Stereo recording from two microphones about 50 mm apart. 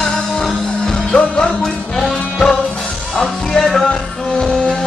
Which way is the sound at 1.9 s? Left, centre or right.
Centre.